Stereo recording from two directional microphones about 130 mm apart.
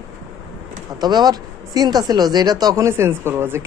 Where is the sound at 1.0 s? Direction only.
30° right (ahead or behind).